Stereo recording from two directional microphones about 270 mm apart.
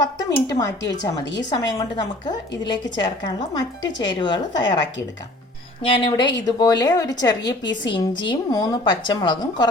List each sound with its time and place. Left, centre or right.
0.0 s a woman's voice: centre
1.2 s a woman's voice: left
1.5 s a woman's voice: centre
5.8 s a woman's voice: centre